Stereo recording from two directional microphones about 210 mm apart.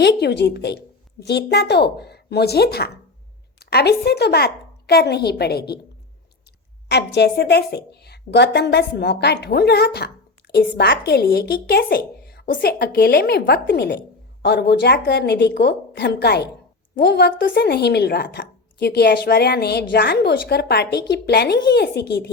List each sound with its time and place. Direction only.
0.0 s a woman's voice: 50° left (ahead or behind)
6.8 s a woman's voice: 55° left (ahead or behind)